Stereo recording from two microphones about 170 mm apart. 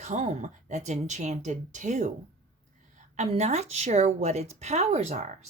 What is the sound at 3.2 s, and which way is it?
A woman's voice, 40° right (ahead or behind).